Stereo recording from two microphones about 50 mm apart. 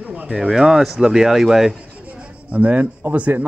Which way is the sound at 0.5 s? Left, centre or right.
Centre.